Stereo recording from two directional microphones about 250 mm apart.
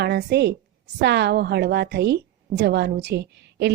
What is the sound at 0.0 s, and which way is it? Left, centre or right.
A woman's voice, right.